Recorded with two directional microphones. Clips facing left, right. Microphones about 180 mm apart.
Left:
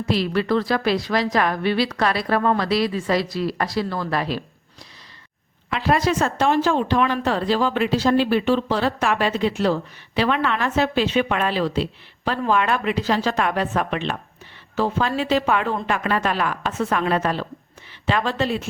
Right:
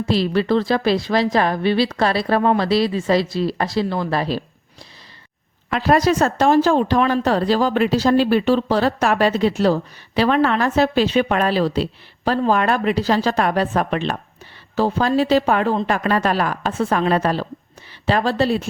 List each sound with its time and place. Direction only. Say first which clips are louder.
0.0 s a woman's voice: right 3 dB; 30° right (ahead or behind)
5.7 s speech: right 4 dB; 40° right (ahead or behind)